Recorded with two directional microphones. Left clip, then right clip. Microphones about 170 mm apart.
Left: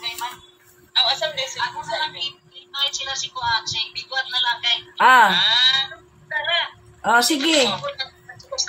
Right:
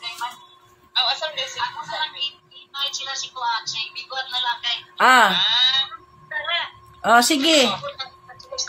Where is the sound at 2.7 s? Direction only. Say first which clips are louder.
Left 3 dB; 5° left (ahead or behind).